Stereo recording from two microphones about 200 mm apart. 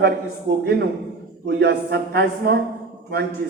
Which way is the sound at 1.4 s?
55° right (ahead or behind).